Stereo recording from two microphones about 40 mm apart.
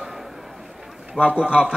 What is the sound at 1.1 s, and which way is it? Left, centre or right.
Speech, right.